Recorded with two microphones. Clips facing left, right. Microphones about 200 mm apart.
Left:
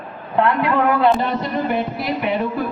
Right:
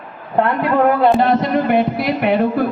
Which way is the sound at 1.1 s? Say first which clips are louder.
Right 6 dB; 75° right (ahead or behind).